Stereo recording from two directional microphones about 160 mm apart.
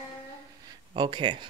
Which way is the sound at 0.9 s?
30° right (ahead or behind).